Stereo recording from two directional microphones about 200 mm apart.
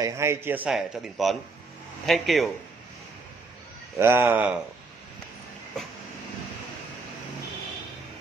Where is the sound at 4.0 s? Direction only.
10° right (ahead or behind).